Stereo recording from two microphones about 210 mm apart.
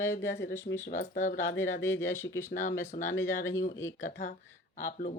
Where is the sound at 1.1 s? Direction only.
40° left (ahead or behind).